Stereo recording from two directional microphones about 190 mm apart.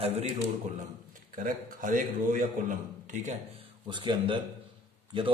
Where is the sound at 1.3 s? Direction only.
45° right (ahead or behind).